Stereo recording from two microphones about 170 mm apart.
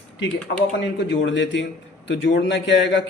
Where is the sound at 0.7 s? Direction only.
90° left.